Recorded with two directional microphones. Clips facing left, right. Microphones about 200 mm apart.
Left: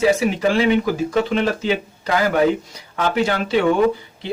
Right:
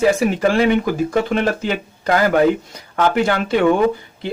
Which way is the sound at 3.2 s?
50° right (ahead or behind).